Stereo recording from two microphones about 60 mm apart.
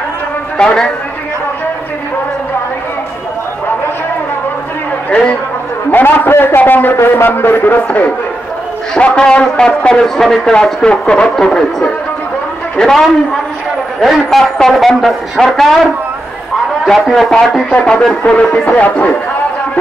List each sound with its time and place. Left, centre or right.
0.6 s speech: centre
5.9 s a man's voice: left
8.9 s speech: centre
10.0 s a woman's voice: centre
16.8 s a woman's voice: centre
17.8 s speech: centre